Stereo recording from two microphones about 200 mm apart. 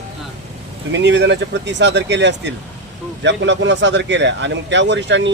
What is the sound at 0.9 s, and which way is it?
Speech, 60° right (ahead or behind).